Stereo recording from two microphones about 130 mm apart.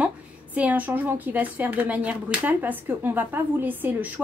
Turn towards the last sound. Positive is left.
turn(degrees=-15)  # may be behind; listen again after turning